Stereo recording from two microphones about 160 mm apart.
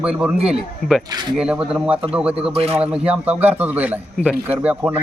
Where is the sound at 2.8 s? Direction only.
5° right (ahead or behind).